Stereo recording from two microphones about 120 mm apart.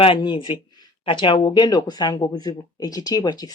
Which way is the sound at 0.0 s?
45° left (ahead or behind).